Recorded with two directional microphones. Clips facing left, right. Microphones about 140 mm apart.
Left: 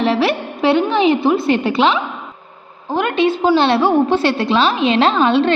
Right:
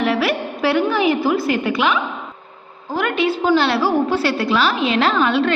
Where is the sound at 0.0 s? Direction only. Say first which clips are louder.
Left 3 dB; 30° left (ahead or behind).